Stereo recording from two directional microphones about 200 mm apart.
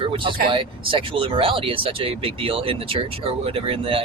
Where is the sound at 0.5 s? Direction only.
25° right (ahead or behind).